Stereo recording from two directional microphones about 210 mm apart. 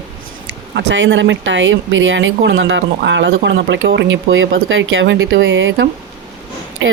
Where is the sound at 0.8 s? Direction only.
60° right (ahead or behind).